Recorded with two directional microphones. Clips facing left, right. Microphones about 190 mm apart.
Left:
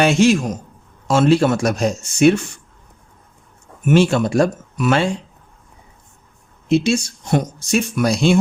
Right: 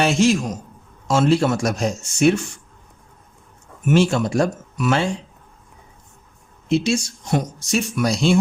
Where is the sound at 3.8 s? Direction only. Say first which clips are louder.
Left 3 dB; 60° left (ahead or behind).